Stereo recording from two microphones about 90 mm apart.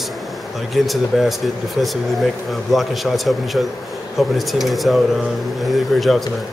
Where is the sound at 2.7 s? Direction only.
Centre (ahead or behind).